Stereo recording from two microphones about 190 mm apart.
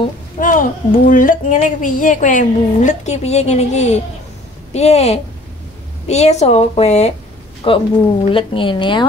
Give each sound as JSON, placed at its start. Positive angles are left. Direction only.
{"t": 0.4, "sound": "a woman's voice", "side_deg": 45}